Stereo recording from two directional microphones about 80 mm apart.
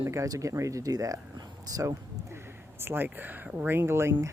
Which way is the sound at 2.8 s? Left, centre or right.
Right.